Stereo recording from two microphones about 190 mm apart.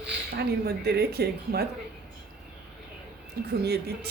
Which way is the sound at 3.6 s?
55° right (ahead or behind).